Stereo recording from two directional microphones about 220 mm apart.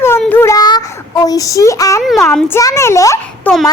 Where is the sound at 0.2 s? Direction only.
10° left (ahead or behind).